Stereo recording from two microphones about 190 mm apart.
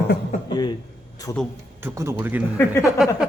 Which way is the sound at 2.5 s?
15° left (ahead or behind).